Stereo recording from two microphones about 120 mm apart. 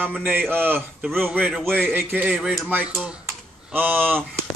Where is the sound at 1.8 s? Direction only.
15° right (ahead or behind).